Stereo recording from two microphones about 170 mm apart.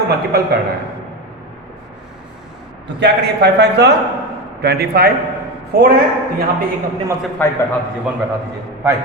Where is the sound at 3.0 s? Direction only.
80° right.